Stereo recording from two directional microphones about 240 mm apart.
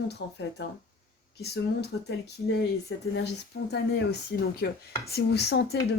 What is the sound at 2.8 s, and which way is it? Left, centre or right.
Speech, left.